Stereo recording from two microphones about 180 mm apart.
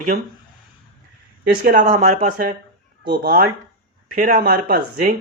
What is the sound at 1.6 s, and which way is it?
Speech, 50° right (ahead or behind).